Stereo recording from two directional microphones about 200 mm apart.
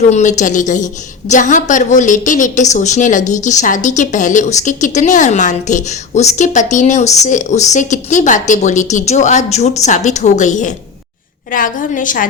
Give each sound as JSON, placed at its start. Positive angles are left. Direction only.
{"t": 0.1, "sound": "a woman's voice", "side_deg": 35}